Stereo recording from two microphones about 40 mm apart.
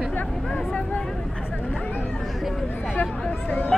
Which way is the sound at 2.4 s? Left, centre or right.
Centre.